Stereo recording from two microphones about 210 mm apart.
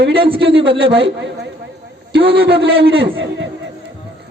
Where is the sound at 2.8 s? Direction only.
25° right (ahead or behind).